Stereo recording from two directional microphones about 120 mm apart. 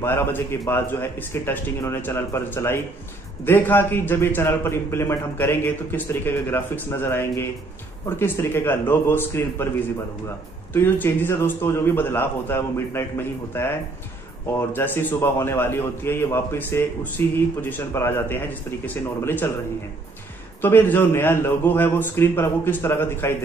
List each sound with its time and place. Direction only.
0.0 s a man's voice: 20° left (ahead or behind)
10.7 s a man's voice: 20° left (ahead or behind)
20.6 s a man's voice: 15° left (ahead or behind)